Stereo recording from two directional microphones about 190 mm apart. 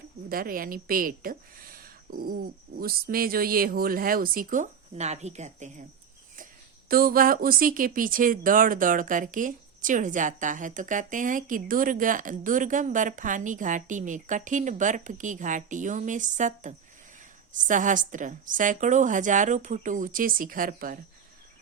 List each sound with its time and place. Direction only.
0.3 s a woman's voice: 50° right (ahead or behind)